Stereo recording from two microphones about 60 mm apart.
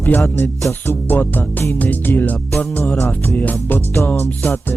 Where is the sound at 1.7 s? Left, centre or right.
Left.